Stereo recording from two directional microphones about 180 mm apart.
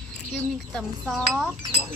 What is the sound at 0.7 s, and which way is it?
Speech, centre (ahead or behind).